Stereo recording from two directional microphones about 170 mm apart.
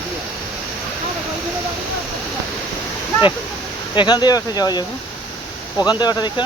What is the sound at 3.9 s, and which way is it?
Speech, 25° left (ahead or behind).